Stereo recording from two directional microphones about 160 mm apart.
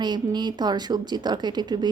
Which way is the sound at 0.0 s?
25° right (ahead or behind).